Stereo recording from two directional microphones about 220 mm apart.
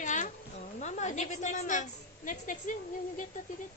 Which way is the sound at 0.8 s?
30° left (ahead or behind).